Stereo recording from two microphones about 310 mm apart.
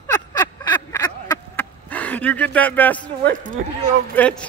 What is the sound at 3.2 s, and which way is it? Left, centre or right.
Speech, right.